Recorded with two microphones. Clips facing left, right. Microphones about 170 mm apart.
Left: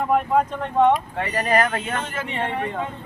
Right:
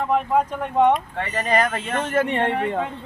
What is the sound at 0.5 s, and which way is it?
Speech, 10° right (ahead or behind).